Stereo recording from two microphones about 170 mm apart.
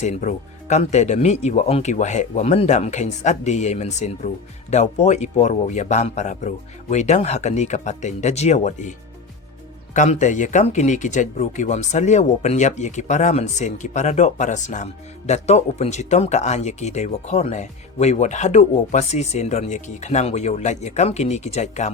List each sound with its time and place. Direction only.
0.0 s speech: 45° left (ahead or behind)